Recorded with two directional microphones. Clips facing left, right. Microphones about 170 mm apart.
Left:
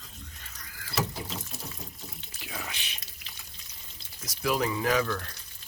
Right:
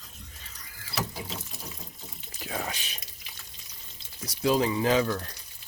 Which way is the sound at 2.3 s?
40° right (ahead or behind).